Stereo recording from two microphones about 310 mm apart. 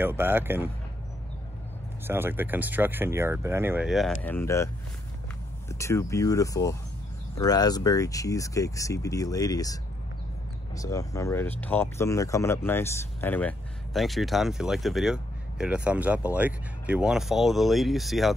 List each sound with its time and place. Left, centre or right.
0.0 s speech: centre
2.0 s speech: centre
5.7 s speech: centre